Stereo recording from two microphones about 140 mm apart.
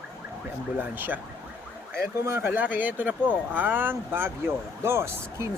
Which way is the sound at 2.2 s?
15° right (ahead or behind).